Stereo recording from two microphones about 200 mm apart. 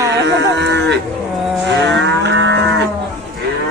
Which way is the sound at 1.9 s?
65° right (ahead or behind).